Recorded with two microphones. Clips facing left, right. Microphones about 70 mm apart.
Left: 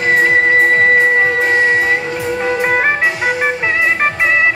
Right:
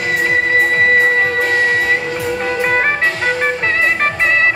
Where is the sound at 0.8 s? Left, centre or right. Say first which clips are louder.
Left 1 dB; left.